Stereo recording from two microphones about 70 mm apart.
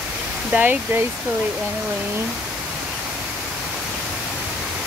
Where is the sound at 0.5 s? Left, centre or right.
Right.